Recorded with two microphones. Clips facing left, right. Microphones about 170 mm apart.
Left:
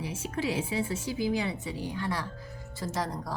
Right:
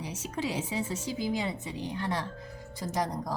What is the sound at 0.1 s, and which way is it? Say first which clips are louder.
A woman's voice: left 1 dB; 20° right (ahead or behind).